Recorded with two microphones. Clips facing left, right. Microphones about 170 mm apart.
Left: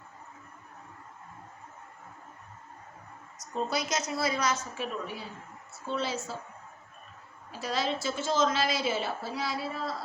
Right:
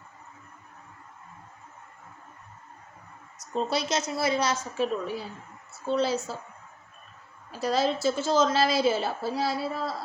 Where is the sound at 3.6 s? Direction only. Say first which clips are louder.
Right 3 dB; 30° right (ahead or behind).